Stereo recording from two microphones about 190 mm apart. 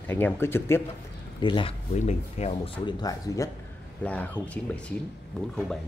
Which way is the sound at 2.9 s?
20° left (ahead or behind).